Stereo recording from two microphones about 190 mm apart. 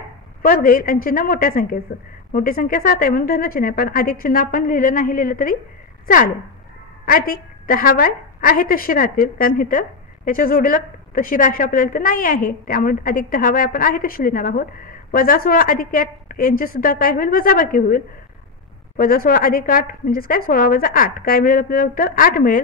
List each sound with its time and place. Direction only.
0.4 s a woman's voice: 45° left (ahead or behind)